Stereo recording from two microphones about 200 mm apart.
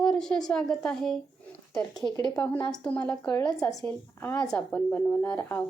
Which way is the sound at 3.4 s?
15° left (ahead or behind).